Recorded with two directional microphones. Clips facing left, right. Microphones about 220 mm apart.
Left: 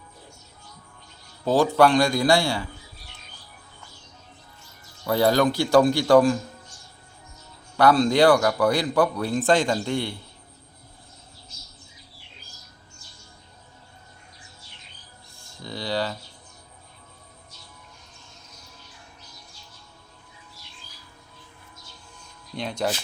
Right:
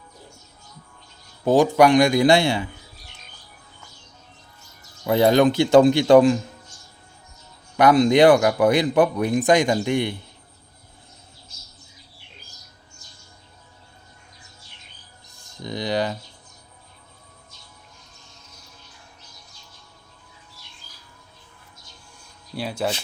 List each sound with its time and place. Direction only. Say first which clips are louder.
1.5 s speech: right 3 dB; 15° right (ahead or behind)
5.0 s speech: right 4 dB; 20° right (ahead or behind)
7.8 s speech: right 3 dB; 20° right (ahead or behind)
15.3 s a sound: right 5 dB; 20° right (ahead or behind)
22.5 s speech: right 1 dB; 5° right (ahead or behind)